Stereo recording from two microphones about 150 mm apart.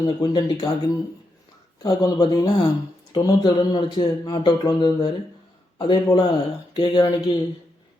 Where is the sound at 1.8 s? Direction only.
25° left (ahead or behind).